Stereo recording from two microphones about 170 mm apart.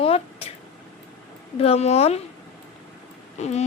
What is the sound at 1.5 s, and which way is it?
Child singing, 35° left (ahead or behind).